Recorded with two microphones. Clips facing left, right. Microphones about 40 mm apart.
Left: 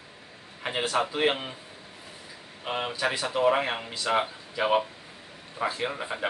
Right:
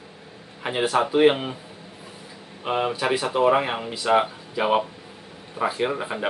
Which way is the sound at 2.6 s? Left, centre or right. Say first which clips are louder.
Right 5 dB; centre.